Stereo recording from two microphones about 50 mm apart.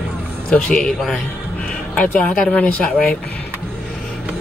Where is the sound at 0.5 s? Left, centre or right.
Centre.